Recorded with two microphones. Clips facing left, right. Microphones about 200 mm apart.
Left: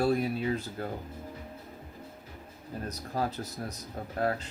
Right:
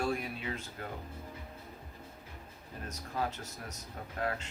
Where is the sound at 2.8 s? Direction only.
35° left (ahead or behind).